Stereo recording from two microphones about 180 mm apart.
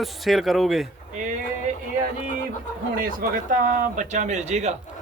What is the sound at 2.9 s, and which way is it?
Speech, 50° right (ahead or behind).